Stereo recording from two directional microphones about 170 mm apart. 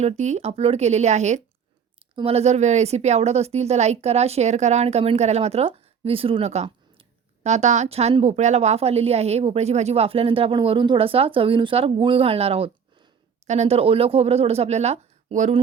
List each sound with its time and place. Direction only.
0.0 s a woman's voice: 40° right (ahead or behind)